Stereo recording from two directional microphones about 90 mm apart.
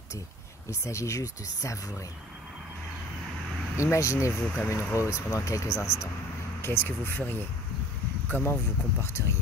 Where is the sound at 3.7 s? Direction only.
35° left (ahead or behind).